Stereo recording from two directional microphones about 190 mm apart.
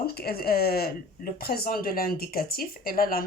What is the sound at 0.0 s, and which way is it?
Speech, 55° left (ahead or behind).